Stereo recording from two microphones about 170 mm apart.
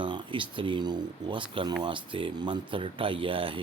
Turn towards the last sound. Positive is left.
turn(degrees=-30)  # may be behind; listen again after turning